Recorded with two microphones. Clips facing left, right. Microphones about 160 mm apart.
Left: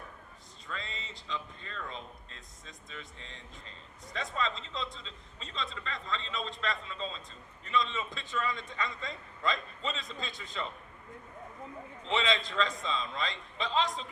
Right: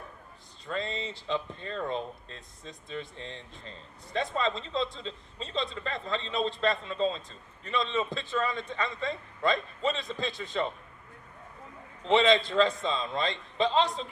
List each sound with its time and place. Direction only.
0.7 s speech: 30° right (ahead or behind)
12.0 s speech: 40° right (ahead or behind)